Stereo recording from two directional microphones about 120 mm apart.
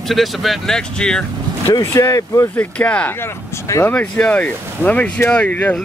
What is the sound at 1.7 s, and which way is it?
Speech, 30° left (ahead or behind).